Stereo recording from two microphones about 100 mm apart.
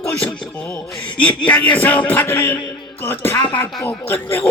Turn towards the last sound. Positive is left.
turn(degrees=20)  # may be behind; listen again after turning